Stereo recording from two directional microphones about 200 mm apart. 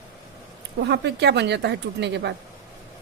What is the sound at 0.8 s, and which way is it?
A woman's voice, 55° right (ahead or behind).